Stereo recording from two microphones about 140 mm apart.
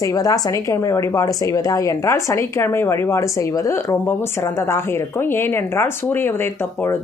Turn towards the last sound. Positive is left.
turn(degrees=15)  # may be behind; listen again after turning